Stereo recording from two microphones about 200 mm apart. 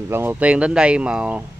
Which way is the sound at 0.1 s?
10° right (ahead or behind).